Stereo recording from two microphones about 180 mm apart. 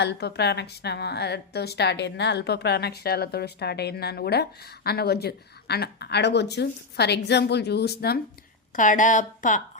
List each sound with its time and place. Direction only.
0.0 s a woman's voice: 65° left (ahead or behind)
8.7 s a woman's voice: 45° left (ahead or behind)